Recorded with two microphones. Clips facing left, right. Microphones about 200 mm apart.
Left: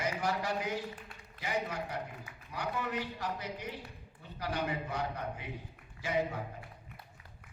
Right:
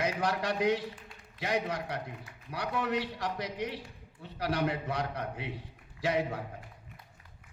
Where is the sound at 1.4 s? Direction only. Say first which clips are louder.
Right 4 dB; 80° right.